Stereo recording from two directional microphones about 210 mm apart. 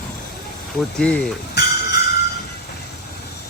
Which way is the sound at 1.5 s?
50° left (ahead or behind).